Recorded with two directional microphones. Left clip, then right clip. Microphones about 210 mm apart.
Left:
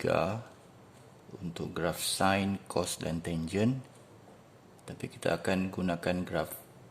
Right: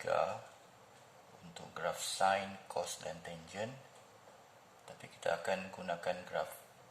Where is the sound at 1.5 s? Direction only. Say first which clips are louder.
Left 6 dB; 55° left (ahead or behind).